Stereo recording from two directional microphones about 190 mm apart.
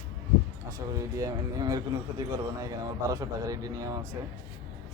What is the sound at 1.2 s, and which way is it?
Speech, 20° right (ahead or behind).